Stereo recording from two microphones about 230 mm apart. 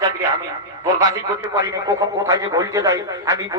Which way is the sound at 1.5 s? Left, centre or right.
Centre.